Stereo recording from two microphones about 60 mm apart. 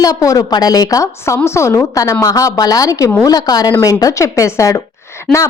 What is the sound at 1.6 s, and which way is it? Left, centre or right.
A woman's voice, left.